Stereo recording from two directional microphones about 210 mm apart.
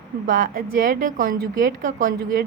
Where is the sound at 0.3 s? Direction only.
40° right (ahead or behind).